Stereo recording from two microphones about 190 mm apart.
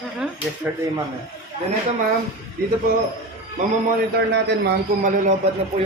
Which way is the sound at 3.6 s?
45° right (ahead or behind).